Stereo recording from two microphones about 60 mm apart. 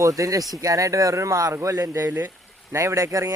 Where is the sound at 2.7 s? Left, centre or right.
Right.